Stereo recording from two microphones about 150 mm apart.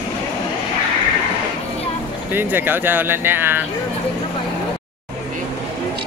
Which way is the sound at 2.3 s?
15° right (ahead or behind).